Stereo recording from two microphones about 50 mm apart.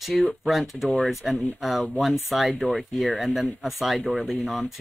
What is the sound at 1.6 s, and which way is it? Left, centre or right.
Speech, centre.